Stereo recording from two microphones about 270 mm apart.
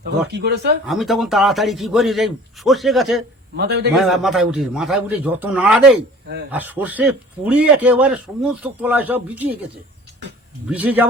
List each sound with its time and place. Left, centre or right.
0.3 s speech: right
0.9 s speech: centre
3.6 s speech: right
3.9 s speech: centre
10.7 s speech: centre